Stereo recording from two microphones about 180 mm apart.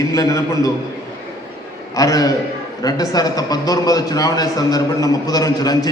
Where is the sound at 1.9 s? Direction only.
20° left (ahead or behind).